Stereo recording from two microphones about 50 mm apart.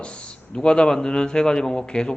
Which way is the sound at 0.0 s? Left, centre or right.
Left.